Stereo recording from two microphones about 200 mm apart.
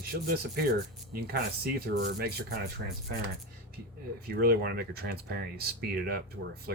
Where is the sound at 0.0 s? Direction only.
50° right (ahead or behind).